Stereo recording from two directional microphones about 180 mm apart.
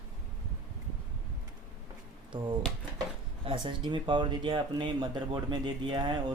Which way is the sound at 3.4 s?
30° right (ahead or behind).